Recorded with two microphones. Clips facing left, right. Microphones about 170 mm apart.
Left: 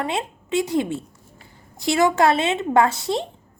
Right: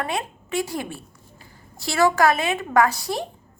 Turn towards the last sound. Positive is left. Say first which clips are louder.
# left 1 dB
turn(degrees=25)  # may be behind; listen again after turning